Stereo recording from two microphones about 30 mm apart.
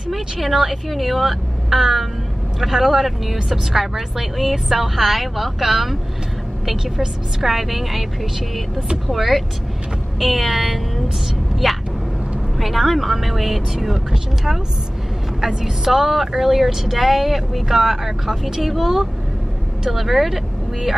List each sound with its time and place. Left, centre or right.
0.1 s a woman's voice: centre
9.0 s a woman's voice: centre
13.9 s speech: right